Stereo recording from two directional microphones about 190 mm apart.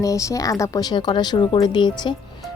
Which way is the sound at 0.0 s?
15° left (ahead or behind).